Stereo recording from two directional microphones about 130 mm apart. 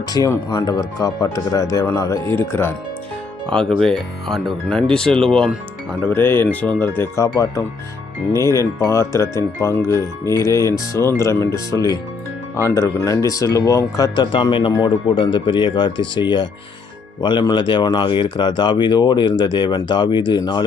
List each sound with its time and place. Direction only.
0.1 s speech: 30° left (ahead or behind)
3.8 s speech: centre (ahead or behind); by 20.7 s 35° left (ahead or behind)